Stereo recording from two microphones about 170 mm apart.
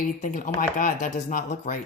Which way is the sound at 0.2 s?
50° left (ahead or behind).